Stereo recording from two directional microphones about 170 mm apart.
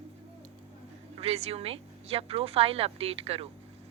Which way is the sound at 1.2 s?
35° right (ahead or behind).